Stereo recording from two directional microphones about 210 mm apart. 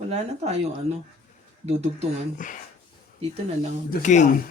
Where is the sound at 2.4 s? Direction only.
40° left (ahead or behind).